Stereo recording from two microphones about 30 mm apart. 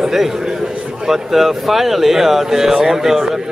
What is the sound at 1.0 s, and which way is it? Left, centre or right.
Speech, centre.